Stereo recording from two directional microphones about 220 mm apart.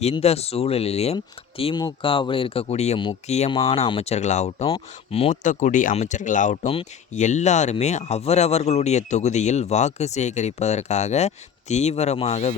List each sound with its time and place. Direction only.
0.0 s speech: 30° left (ahead or behind)